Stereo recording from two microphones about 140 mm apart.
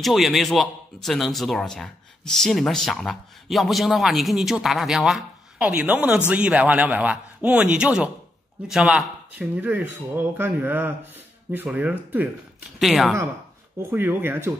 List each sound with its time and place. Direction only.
0.0 s speech: centre (ahead or behind)
12.7 s speech: centre (ahead or behind)
13.8 s speech: 15° right (ahead or behind)